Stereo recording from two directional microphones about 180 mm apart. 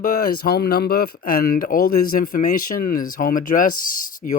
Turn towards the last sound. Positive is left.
turn(degrees=50)  # may be behind; listen again after turning